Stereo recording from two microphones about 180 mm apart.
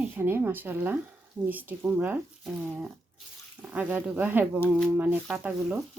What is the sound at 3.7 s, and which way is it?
Speech, 10° right (ahead or behind).